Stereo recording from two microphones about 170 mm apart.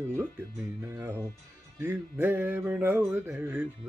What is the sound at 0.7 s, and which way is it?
Music, 15° right (ahead or behind).